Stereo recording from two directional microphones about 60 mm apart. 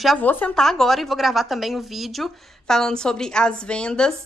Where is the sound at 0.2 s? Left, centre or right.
Left.